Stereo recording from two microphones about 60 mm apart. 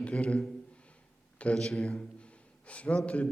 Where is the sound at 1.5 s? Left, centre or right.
Centre.